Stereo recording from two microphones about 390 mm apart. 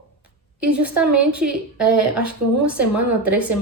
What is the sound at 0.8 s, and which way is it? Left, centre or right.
A woman's voice, centre.